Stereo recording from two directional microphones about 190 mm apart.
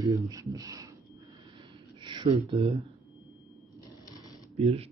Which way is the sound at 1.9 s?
25° right (ahead or behind).